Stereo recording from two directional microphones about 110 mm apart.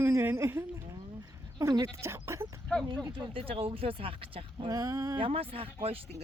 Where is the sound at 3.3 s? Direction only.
55° right (ahead or behind).